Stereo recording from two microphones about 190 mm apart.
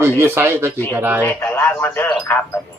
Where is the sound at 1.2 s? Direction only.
10° left (ahead or behind).